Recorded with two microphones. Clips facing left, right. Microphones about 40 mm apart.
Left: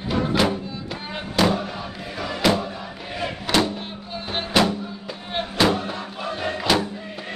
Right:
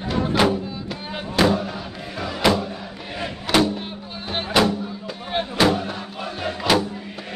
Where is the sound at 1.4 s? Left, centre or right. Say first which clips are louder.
Right 2 dB; centre.